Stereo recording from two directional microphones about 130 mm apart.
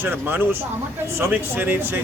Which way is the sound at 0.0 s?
15° right (ahead or behind).